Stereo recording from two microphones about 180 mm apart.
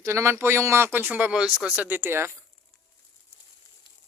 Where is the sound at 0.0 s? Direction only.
15° right (ahead or behind).